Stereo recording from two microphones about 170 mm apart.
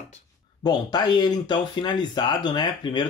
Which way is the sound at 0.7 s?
25° left (ahead or behind).